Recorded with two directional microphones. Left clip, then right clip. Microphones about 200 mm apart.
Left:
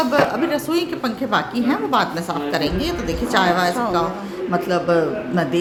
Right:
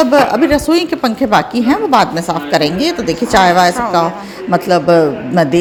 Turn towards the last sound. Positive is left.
turn(degrees=-35)  # may be behind; listen again after turning